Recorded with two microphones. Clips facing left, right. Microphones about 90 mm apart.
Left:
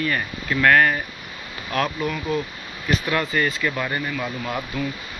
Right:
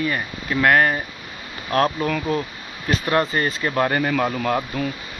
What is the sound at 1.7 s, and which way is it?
Speech, 40° right (ahead or behind).